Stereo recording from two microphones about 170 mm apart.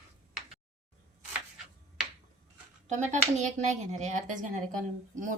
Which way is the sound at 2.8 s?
45° right (ahead or behind).